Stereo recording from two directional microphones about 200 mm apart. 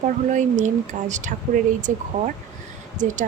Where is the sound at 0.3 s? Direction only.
40° right (ahead or behind).